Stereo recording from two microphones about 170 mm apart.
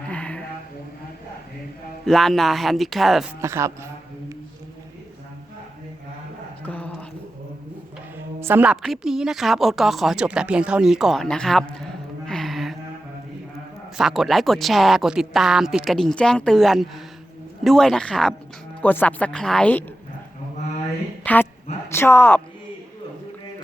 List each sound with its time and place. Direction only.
0.1 s a sound: 10° left (ahead or behind)
2.0 s speech: centre (ahead or behind)
3.4 s speech: 15° right (ahead or behind)
6.6 s a sound: 10° left (ahead or behind)
8.4 s speech: 10° right (ahead or behind)
13.9 s speech: centre (ahead or behind)
21.2 s speech: 10° left (ahead or behind)